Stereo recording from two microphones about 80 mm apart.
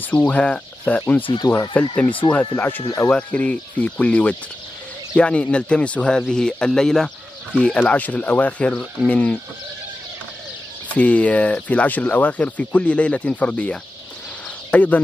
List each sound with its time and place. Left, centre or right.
0.3 s speech: centre
1.2 s speech: left
1.7 s speech: centre
3.1 s speech: centre
10.9 s speech: centre